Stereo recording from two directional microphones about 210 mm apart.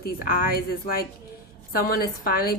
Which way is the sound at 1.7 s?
45° left (ahead or behind).